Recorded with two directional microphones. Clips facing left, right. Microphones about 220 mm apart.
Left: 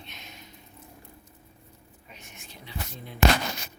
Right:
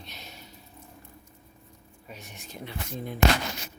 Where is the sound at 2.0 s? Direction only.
40° right (ahead or behind).